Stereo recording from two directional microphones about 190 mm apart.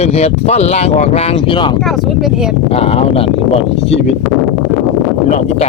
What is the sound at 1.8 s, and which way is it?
Speech, centre (ahead or behind).